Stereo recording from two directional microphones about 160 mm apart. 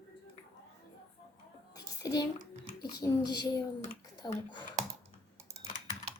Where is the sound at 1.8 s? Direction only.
25° left (ahead or behind).